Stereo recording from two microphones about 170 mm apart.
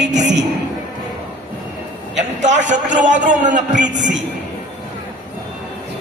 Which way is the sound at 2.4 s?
45° right (ahead or behind).